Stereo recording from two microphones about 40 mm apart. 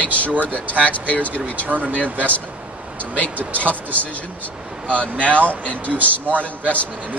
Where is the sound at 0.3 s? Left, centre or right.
Right.